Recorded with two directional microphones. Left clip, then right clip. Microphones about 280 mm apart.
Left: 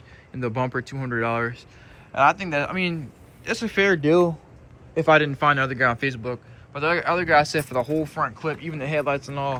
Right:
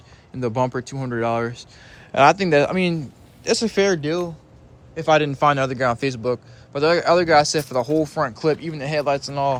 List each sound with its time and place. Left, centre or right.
0.3 s a man's voice: centre
2.1 s a man's voice: right
5.0 s a man's voice: centre